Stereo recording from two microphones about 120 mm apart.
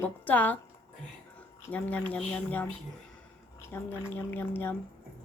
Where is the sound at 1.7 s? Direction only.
15° left (ahead or behind).